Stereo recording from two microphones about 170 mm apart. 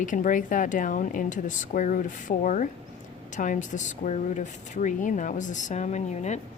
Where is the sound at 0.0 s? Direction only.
50° left (ahead or behind).